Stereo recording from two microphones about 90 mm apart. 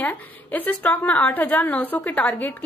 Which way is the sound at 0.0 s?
20° left (ahead or behind).